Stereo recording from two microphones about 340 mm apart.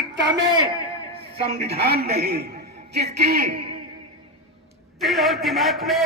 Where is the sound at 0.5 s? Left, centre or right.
Centre.